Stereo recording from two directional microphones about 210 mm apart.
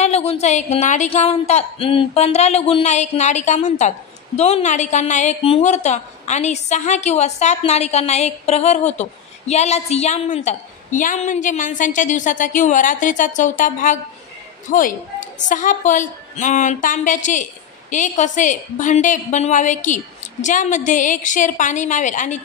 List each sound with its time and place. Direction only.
0.0 s a woman's voice: 30° left (ahead or behind)